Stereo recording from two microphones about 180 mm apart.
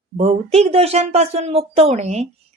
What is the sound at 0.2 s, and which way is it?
Speech, 35° right (ahead or behind).